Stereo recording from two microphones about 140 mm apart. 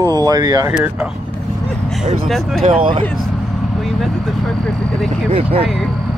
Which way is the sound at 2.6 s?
35° right (ahead or behind).